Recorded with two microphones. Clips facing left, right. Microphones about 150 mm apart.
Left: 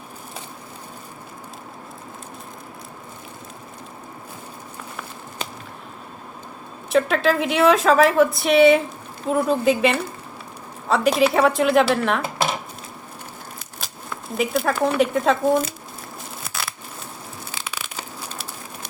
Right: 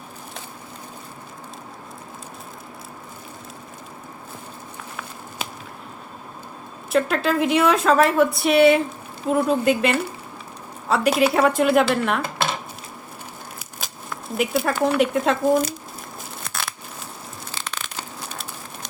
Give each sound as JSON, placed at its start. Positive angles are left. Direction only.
{"t": 6.9, "sound": "a woman's voice", "side_deg": 0}
{"t": 13.7, "sound": "speech", "side_deg": 0}
{"t": 16.4, "sound": "scissors", "side_deg": 5}
{"t": 17.6, "sound": "crushing", "side_deg": 5}